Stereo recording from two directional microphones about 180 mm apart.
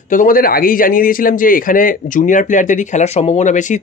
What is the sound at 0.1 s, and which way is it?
A man's voice, 50° left (ahead or behind).